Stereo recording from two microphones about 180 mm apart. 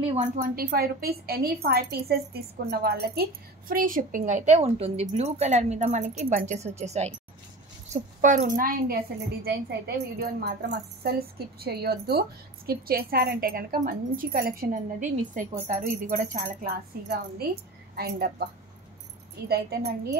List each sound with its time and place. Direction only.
0.4 s a woman's voice: 60° right (ahead or behind)
17.9 s a woman's voice: 60° right (ahead or behind)